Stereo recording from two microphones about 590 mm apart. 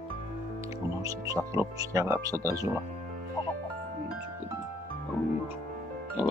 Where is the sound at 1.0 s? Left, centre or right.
Centre.